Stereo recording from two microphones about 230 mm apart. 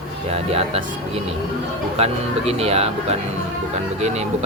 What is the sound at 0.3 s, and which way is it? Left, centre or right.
Speech, right.